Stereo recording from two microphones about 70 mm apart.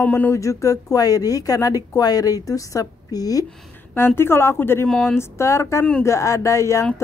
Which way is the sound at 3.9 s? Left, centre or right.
Left.